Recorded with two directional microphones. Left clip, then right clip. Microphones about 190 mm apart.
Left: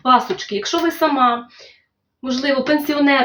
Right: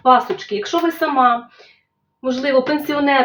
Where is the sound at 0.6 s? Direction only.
15° left (ahead or behind).